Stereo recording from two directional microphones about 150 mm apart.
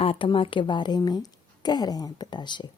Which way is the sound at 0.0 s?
35° left (ahead or behind).